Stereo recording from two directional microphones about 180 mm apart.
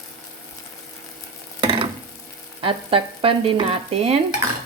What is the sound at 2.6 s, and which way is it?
Frying, 30° right (ahead or behind).